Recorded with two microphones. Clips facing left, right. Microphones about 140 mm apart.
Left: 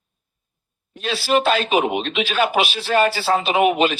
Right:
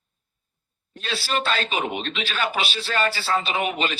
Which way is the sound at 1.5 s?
55° left (ahead or behind).